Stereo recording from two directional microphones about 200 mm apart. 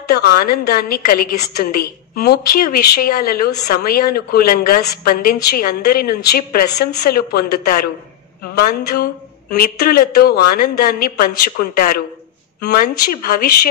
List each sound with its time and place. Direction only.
0.1 s a woman's voice: 50° left (ahead or behind)
9.6 s a woman's voice: 50° left (ahead or behind)